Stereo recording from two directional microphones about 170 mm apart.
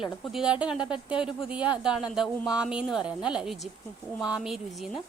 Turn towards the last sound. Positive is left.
turn(degrees=0)  # may be behind; listen again after turning